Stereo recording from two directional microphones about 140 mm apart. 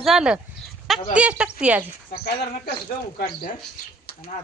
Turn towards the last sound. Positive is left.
turn(degrees=90)